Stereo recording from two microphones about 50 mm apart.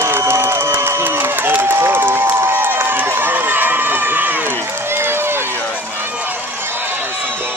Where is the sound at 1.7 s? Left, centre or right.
Right.